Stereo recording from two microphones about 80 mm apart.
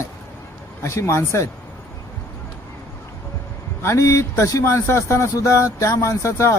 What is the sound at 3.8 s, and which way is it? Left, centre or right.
Speech, left.